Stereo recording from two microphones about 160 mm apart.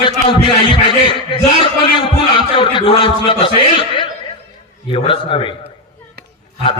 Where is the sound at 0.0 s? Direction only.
30° left (ahead or behind).